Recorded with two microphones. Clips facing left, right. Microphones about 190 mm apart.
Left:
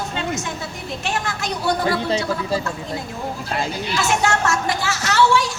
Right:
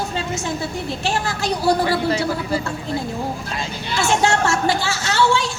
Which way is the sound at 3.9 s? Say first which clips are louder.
Right 3 dB; 30° right (ahead or behind).